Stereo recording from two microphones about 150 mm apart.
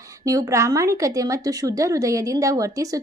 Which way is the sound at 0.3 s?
20° right (ahead or behind).